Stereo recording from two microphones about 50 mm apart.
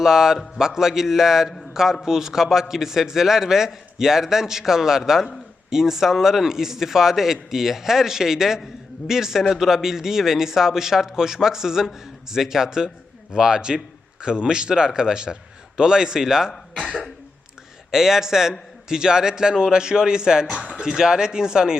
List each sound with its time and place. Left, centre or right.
0.0 s a man's voice: centre
16.5 s speech: centre
17.9 s a man's voice: centre